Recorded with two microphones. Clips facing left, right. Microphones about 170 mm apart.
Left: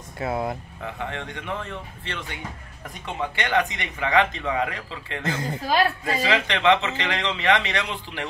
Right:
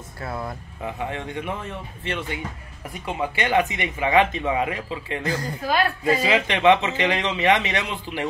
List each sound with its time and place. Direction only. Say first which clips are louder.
0.2 s a woman's voice: left 5 dB; 20° left (ahead or behind)
0.8 s speech: right 3 dB; 15° right (ahead or behind)
5.2 s a woman's voice: left 2 dB; 25° left (ahead or behind)
6.2 s speech: right 2 dB; 15° right (ahead or behind)